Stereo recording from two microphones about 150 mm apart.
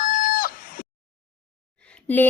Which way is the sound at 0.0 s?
65° left (ahead or behind).